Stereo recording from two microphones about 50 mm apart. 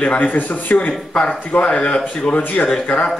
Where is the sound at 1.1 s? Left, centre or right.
Centre.